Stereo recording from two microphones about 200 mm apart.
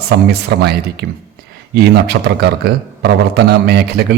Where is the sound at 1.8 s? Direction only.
55° right (ahead or behind).